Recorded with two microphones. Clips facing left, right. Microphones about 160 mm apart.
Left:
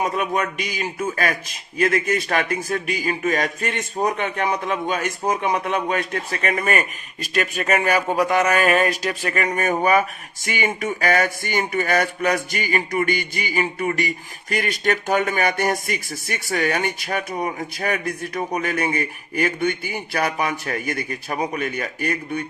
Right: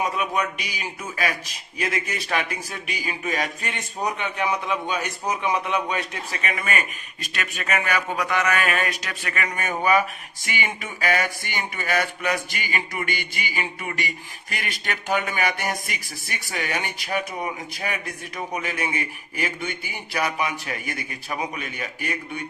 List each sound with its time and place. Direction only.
0.0 s speech: 45° left (ahead or behind)